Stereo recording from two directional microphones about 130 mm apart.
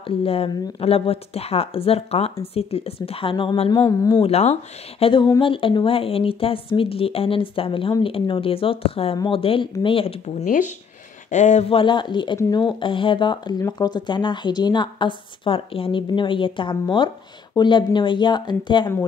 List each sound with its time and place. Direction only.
0.0 s speech: 45° left (ahead or behind)
3.8 s speech: 25° left (ahead or behind)
4.2 s speech: 55° left (ahead or behind)
11.7 s a woman's voice: 40° left (ahead or behind)
12.8 s a woman's voice: 40° left (ahead or behind)